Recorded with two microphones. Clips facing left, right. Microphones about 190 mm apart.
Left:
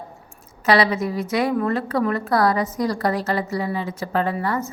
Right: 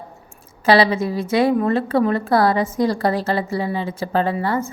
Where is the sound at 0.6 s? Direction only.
30° right (ahead or behind).